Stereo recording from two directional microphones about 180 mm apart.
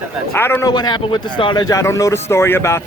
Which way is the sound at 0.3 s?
10° left (ahead or behind).